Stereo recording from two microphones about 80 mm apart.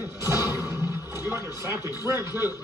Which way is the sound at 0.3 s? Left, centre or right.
Right.